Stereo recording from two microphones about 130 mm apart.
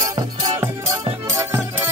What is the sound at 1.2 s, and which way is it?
Music, 20° right (ahead or behind).